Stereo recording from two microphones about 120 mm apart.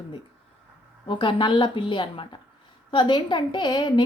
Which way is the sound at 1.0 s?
40° left (ahead or behind).